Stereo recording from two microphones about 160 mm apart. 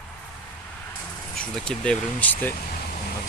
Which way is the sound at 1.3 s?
5° left (ahead or behind).